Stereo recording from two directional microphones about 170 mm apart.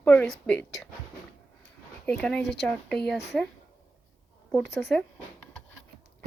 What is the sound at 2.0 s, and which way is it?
Speech, 5° left (ahead or behind).